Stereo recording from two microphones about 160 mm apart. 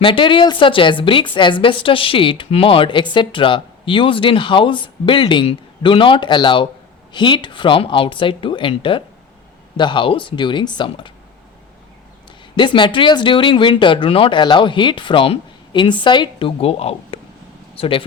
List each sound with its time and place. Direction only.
0.0 s a woman's voice: 30° left (ahead or behind)
12.5 s a woman's voice: 30° left (ahead or behind)